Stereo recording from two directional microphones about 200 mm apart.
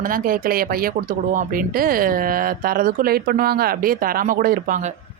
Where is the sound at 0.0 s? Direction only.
45° right (ahead or behind).